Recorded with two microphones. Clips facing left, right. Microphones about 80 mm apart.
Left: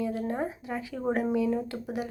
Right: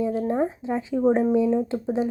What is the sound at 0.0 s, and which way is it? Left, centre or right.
Speech, right.